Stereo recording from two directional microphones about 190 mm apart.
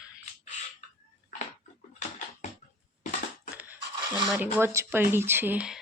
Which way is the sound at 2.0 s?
40° left (ahead or behind).